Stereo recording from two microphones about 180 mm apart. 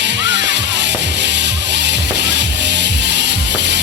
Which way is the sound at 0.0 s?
75° right (ahead or behind).